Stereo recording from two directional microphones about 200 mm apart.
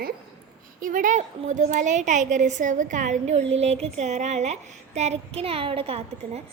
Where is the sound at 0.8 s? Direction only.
45° right (ahead or behind).